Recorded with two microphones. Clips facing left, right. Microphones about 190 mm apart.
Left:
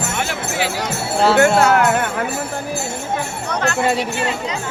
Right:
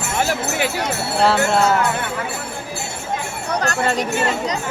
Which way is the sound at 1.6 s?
65° left (ahead or behind).